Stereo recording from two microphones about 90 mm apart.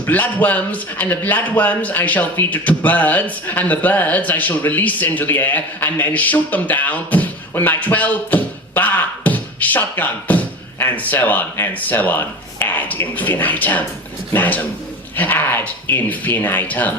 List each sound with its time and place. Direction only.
0.0 s a man's voice: 20° left (ahead or behind)